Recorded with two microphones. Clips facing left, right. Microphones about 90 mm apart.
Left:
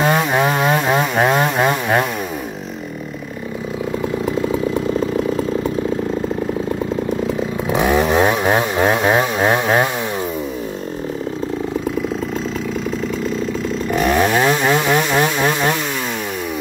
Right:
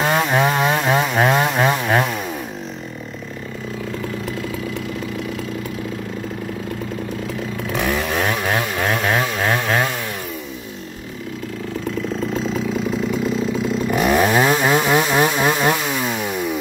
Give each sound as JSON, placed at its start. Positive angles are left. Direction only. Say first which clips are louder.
{"t": 0.0, "sound": "chainsaw", "louder": "left 2 dB", "side_deg": 0}
{"t": 4.4, "sound": "chainsaw", "louder": "left 8 dB", "side_deg": 30}
{"t": 7.6, "sound": "chainsaw", "louder": "left 6 dB", "side_deg": 20}
{"t": 13.8, "sound": "chainsaw", "louder": "left 1 dB", "side_deg": -5}